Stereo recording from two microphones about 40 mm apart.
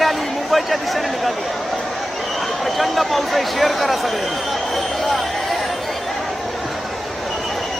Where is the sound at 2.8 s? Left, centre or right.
Centre.